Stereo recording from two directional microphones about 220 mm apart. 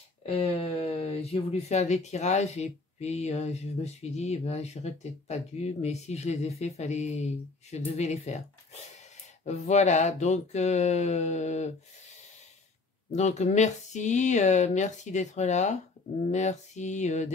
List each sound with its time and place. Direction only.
0.2 s speech: 25° left (ahead or behind)
13.1 s speech: 30° left (ahead or behind)